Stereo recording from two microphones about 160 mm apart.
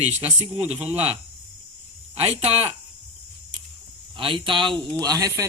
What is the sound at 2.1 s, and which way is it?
Speech, 40° right (ahead or behind).